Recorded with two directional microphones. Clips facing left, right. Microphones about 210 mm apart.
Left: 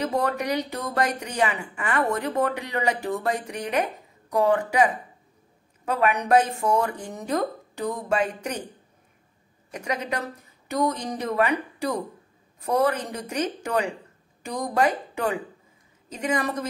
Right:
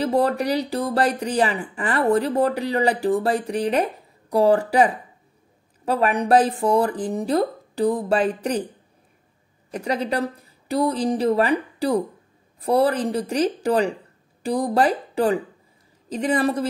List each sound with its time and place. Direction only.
0.0 s speech: 30° right (ahead or behind)
9.7 s speech: 35° right (ahead or behind)